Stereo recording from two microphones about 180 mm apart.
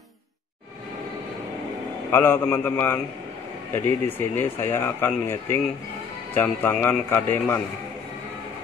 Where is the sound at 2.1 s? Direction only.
10° left (ahead or behind).